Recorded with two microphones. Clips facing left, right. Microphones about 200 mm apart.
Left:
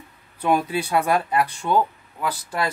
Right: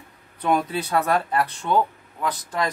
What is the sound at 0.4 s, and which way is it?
Speech, 10° left (ahead or behind).